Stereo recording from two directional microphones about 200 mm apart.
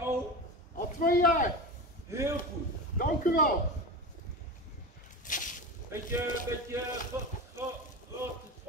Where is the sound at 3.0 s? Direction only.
45° left (ahead or behind).